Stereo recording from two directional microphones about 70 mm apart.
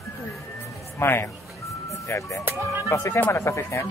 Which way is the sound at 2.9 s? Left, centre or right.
Left.